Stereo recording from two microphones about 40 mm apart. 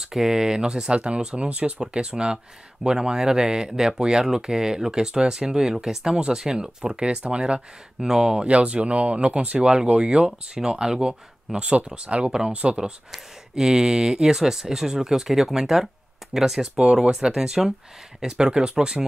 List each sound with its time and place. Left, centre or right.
0.0 s speech: centre; by 1.9 s right
2.0 s speech: right
8.0 s speech: centre
8.5 s speech: right
12.8 s speech: centre
16.8 s speech: right
17.3 s speech: centre